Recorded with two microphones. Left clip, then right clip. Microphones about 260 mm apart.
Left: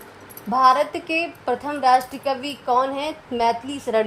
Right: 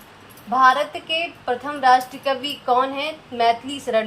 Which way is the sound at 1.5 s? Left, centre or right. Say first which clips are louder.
Right 2 dB; left.